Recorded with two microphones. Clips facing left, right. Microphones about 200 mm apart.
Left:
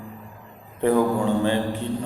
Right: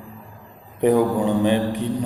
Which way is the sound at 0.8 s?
15° right (ahead or behind).